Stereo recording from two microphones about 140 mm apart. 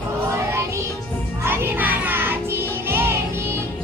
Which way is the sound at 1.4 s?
15° right (ahead or behind).